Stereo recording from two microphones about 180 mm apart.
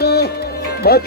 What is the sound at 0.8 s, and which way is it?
Speech, 60° left (ahead or behind).